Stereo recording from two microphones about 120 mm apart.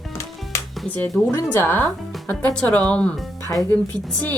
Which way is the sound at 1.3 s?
20° left (ahead or behind).